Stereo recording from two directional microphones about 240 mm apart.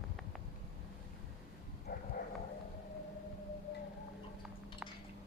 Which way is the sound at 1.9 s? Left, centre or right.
Left.